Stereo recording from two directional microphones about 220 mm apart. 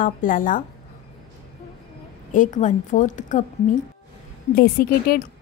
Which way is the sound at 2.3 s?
35° left (ahead or behind).